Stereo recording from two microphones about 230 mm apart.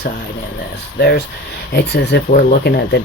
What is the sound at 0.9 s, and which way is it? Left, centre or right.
Speech, left.